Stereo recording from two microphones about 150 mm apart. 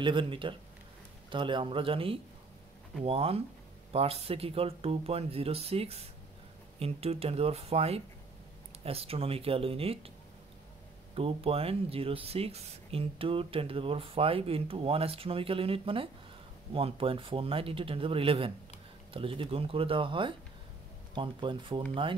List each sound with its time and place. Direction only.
0.0 s speech: 35° right (ahead or behind)
11.1 s speech: 40° right (ahead or behind)